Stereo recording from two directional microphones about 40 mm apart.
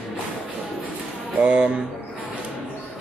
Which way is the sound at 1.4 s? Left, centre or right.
Right.